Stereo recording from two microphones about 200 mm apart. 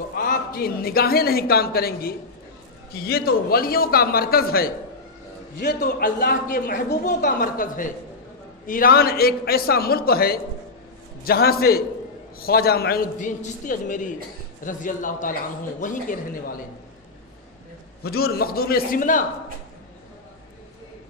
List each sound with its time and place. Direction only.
0.1 s a man's voice: 45° left (ahead or behind)
5.9 s a woman's voice: 50° left (ahead or behind)
18.0 s a woman's voice: 50° left (ahead or behind)